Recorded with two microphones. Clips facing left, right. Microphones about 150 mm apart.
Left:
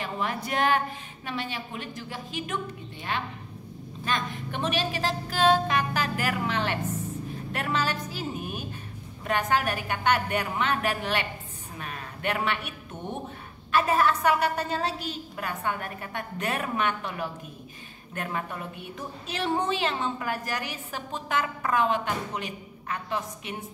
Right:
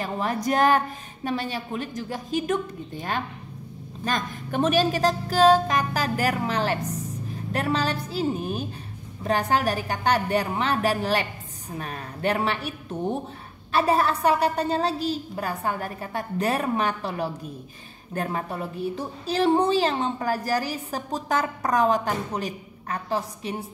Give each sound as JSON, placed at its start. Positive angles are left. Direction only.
{"t": 0.0, "sound": "a woman's voice", "side_deg": -40}